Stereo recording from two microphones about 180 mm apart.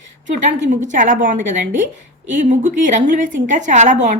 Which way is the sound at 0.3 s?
45° right (ahead or behind).